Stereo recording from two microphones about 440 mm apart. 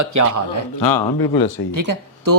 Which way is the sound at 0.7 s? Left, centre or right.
Left.